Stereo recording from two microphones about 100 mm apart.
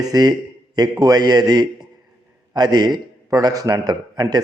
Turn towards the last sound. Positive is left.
turn(degrees=-45)  # may be behind; listen again after turning